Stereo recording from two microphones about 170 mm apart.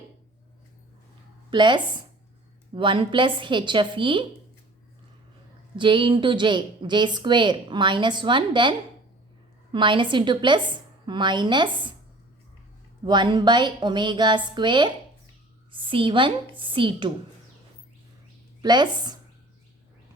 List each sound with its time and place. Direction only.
1.5 s a woman's voice: 25° right (ahead or behind)
5.7 s a woman's voice: 30° right (ahead or behind)
9.7 s a woman's voice: 30° right (ahead or behind)
13.1 s a woman's voice: 25° right (ahead or behind)
18.6 s a woman's voice: 25° right (ahead or behind)